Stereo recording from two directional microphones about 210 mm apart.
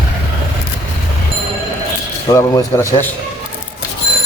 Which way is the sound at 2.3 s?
15° left (ahead or behind).